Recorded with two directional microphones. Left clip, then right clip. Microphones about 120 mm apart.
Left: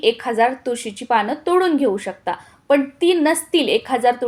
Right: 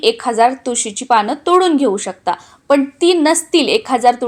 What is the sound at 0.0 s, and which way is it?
Speech, 30° right (ahead or behind).